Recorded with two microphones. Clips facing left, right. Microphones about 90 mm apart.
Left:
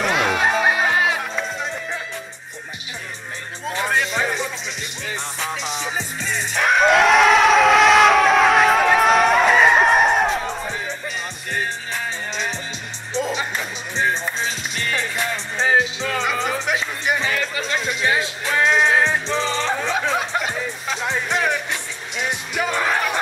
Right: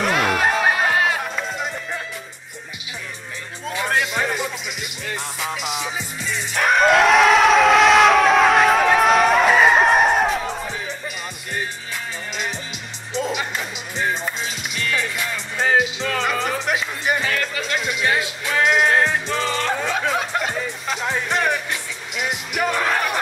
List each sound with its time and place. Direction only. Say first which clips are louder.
0.0 s music: even; centre (ahead or behind)
3.8 s music: even; 5° right (ahead or behind)
5.8 s music: left 1 dB; 35° left (ahead or behind)
6.5 s crowd: even; centre (ahead or behind)
13.9 s music: left 2 dB; 30° left (ahead or behind)
16.1 s music: even; centre (ahead or behind)
18.6 s music: even; 5° right (ahead or behind)
22.6 s music: right 1 dB; centre (ahead or behind)